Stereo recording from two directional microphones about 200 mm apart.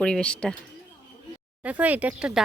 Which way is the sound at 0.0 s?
5° left (ahead or behind).